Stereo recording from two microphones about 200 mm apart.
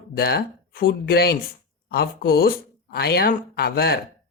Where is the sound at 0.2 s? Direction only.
50° left (ahead or behind).